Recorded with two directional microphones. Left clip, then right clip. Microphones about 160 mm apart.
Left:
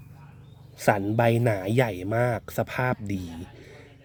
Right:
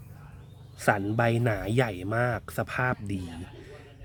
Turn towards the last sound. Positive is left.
turn(degrees=30)  # may be behind; listen again after turning